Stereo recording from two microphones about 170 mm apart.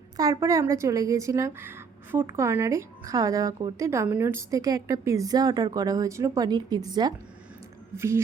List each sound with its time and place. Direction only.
0.2 s speech: 20° right (ahead or behind)